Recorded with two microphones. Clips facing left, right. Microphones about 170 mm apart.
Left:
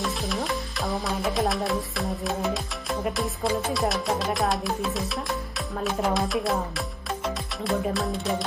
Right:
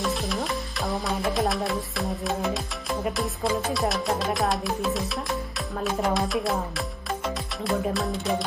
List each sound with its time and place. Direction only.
0.0 s music: centre (ahead or behind)